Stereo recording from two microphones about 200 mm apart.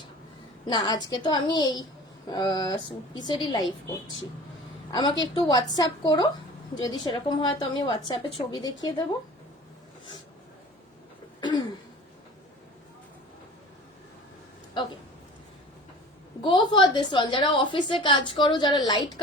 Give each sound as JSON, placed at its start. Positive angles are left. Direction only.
{"t": 1.1, "sound": "a woman's voice", "side_deg": 20}
{"t": 4.9, "sound": "a woman's voice", "side_deg": 20}
{"t": 11.3, "sound": "throat clearing", "side_deg": 20}
{"t": 16.5, "sound": "a woman's voice", "side_deg": 25}